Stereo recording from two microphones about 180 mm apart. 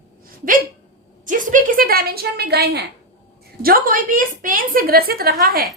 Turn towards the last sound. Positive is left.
turn(degrees=-60)  # may be behind; listen again after turning